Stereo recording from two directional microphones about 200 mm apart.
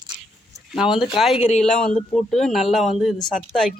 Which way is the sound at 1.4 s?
35° left (ahead or behind).